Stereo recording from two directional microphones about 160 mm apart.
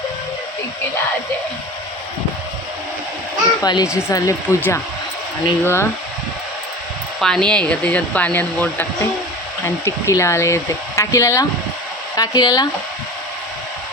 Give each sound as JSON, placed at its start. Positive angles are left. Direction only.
{"t": 3.6, "sound": "speech", "side_deg": 25}
{"t": 7.2, "sound": "speech", "side_deg": 5}